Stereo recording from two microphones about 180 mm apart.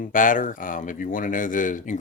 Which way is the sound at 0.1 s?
50° left (ahead or behind).